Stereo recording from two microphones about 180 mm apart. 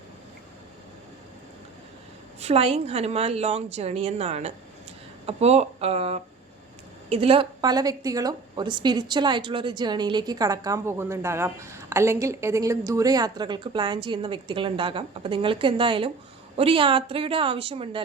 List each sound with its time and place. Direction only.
2.4 s a woman's voice: 35° right (ahead or behind)